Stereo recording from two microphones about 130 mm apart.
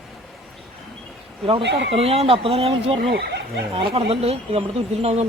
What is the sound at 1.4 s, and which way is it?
Speech, 45° right (ahead or behind).